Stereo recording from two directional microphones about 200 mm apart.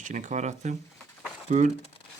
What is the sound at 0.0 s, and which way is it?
Speech, 40° right (ahead or behind).